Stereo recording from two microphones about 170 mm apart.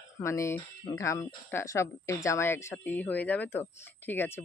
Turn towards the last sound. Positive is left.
turn(degrees=10)  # may be behind; listen again after turning